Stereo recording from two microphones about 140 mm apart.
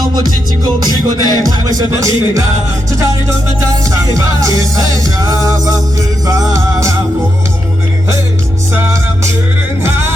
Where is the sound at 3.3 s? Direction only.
25° right (ahead or behind).